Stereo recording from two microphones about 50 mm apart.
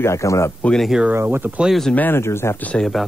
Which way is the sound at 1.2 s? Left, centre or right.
Right.